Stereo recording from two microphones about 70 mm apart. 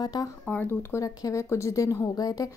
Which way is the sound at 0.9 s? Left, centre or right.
Left.